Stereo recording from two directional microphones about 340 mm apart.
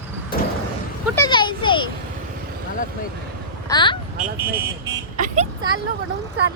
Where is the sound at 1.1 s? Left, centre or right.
Centre.